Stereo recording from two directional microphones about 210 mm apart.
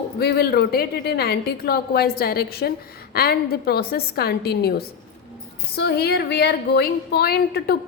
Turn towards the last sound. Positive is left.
turn(degrees=50)  # may be behind; listen again after turning